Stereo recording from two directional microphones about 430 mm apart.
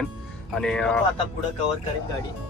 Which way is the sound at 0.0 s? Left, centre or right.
Centre.